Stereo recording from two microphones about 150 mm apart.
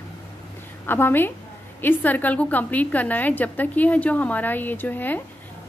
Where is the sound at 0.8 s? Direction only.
15° left (ahead or behind).